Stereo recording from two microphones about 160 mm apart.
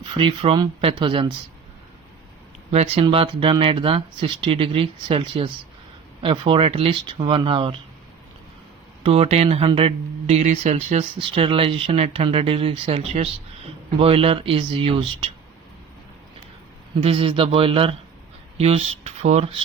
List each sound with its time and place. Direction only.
0.0 s speech: 30° right (ahead or behind)
2.7 s speech: 40° right (ahead or behind)
9.0 s speech: 40° right (ahead or behind)
17.0 s speech: 35° right (ahead or behind)